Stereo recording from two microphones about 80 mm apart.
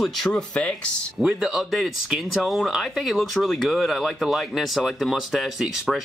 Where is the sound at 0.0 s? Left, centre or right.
Centre.